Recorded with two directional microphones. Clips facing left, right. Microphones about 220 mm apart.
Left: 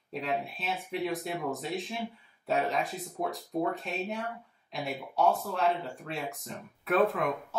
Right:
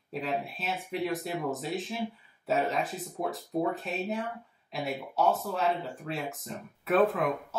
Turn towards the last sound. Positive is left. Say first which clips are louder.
# right 1 dB
turn(degrees=0)  # may be behind; listen again after turning